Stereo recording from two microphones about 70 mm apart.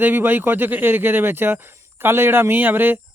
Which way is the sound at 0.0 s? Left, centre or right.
Right.